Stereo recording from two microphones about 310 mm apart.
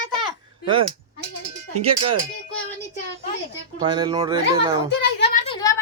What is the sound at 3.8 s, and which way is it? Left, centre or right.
Speech, centre.